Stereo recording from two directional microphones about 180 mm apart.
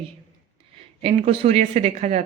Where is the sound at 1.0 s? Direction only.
35° right (ahead or behind).